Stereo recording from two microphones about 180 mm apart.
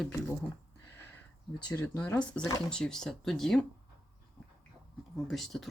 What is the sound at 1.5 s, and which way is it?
Speech, 20° left (ahead or behind).